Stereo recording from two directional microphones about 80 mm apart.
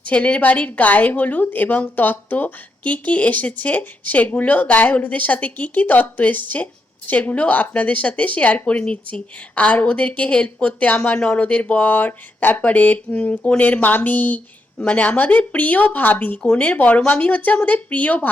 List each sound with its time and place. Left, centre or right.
0.0 s speech: centre